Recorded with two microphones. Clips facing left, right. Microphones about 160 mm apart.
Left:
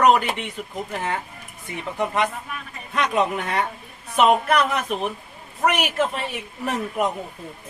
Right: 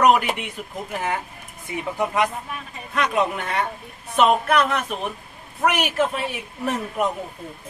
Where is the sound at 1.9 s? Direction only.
5° right (ahead or behind).